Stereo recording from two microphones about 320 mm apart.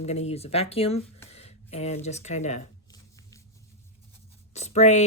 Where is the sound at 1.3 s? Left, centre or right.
Centre.